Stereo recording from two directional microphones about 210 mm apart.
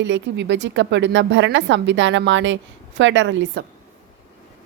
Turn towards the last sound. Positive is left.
turn(degrees=-55)  # may be behind; listen again after turning